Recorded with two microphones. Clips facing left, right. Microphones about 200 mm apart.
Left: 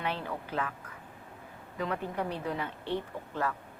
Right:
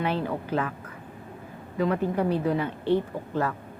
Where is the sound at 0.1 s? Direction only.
35° right (ahead or behind).